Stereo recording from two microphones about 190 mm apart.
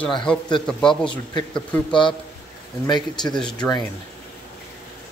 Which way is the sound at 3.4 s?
20° left (ahead or behind).